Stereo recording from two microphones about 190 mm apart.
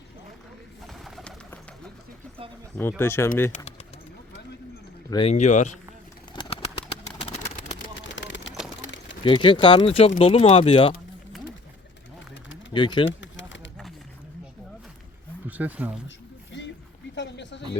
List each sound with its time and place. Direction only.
0.9 s bird: centre (ahead or behind)
3.0 s speech: 15° left (ahead or behind)
3.5 s speech: 40° left (ahead or behind)
5.1 s speech: 35° left (ahead or behind)
6.3 s bird: 30° left (ahead or behind)
8.1 s a sound: 75° left (ahead or behind)
9.2 s speech: 25° left (ahead or behind)
12.7 s speech: 25° left (ahead or behind)
13.1 s pigeon: 75° left (ahead or behind)
15.4 s speech: 10° right (ahead or behind)
16.0 s a sound: 70° left (ahead or behind)